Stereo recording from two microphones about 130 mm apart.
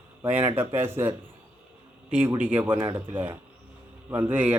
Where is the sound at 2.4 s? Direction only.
15° right (ahead or behind).